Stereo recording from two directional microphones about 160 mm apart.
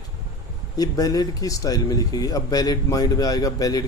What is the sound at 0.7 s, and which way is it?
Speech, 25° left (ahead or behind).